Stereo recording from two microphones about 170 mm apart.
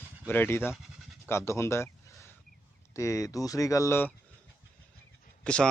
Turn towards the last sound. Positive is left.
turn(degrees=5)  # may be behind; listen again after turning